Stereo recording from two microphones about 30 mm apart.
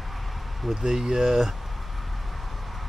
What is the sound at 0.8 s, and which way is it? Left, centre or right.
Speech, centre.